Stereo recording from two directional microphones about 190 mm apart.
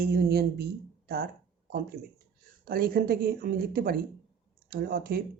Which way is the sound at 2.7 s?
50° right (ahead or behind).